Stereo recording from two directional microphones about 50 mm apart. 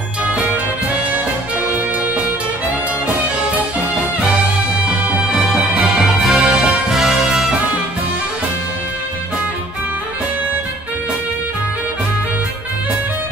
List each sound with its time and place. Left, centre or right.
5.3 s music: centre